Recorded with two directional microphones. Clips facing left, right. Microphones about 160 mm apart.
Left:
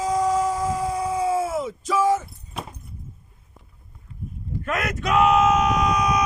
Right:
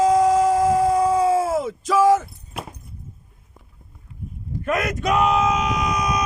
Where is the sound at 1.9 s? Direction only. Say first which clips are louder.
Right 5 dB; 90° right.